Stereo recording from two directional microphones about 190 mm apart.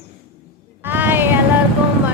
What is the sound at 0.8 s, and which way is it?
Music, 10° right (ahead or behind).